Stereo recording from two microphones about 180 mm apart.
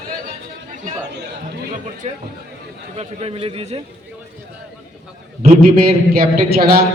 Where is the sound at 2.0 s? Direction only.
35° right (ahead or behind).